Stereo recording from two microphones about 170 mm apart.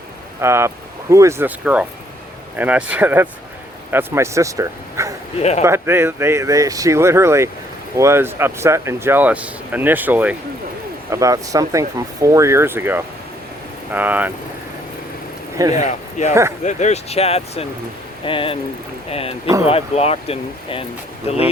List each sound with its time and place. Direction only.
0.4 s speech: 15° right (ahead or behind)
5.4 s speech: 40° left (ahead or behind)
5.6 s speech: 15° right (ahead or behind)
15.7 s speech: 45° left (ahead or behind)
19.6 s speech: 35° left (ahead or behind)